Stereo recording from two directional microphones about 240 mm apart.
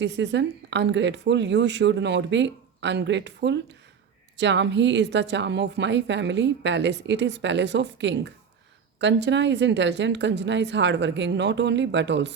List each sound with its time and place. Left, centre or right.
0.0 s a woman's voice: right